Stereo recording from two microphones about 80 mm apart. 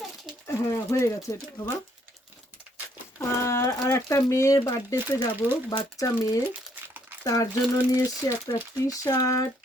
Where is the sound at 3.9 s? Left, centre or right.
Left.